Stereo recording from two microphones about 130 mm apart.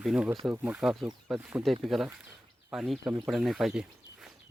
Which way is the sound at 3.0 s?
30° right (ahead or behind).